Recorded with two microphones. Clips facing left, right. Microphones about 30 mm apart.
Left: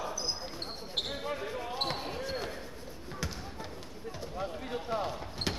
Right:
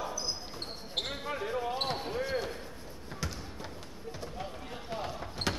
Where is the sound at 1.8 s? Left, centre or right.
Centre.